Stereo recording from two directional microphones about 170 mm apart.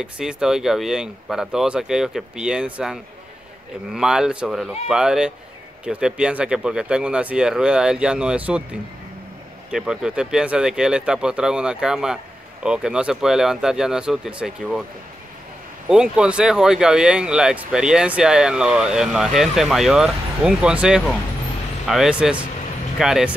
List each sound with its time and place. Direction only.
0.0 s speech: 5° right (ahead or behind)
9.7 s speech: 5° right (ahead or behind)
15.9 s speech: 5° right (ahead or behind)